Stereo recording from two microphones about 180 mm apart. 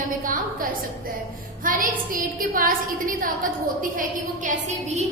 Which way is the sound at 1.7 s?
50° right (ahead or behind).